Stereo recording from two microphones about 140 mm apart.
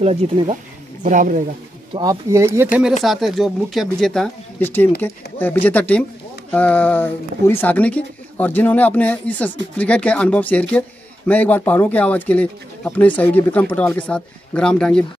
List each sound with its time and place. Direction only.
0.0 s speech: 45° right (ahead or behind)
1.0 s speech: 70° right (ahead or behind)
2.0 s speech: 25° right (ahead or behind)
3.0 s speech: centre (ahead or behind)
4.6 s speech: 15° left (ahead or behind)